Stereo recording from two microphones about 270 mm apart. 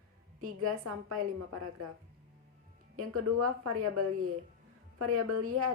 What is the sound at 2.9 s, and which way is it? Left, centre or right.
A woman's voice, right.